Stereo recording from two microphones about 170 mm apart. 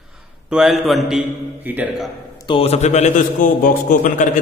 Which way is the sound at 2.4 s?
35° left (ahead or behind).